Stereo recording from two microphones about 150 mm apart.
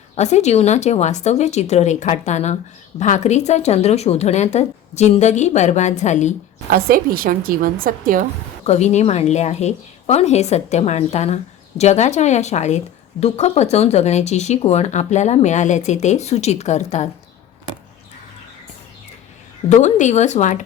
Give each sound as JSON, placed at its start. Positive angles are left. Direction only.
{"t": 0.2, "sound": "a woman's voice", "side_deg": 50}
{"t": 6.7, "sound": "a woman's voice", "side_deg": -75}
{"t": 8.6, "sound": "a woman's voice", "side_deg": 50}
{"t": 19.7, "sound": "a woman's voice", "side_deg": 50}